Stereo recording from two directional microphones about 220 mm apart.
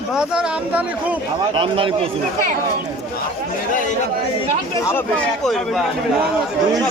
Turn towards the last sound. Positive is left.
turn(degrees=0)  # may be behind; listen again after turning